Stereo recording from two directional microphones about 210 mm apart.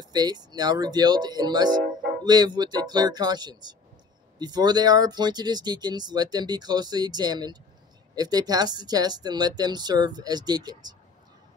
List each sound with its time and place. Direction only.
0.0 s speech: 20° right (ahead or behind)